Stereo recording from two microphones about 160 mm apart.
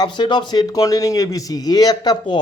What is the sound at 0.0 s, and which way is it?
A man's voice, 30° left (ahead or behind).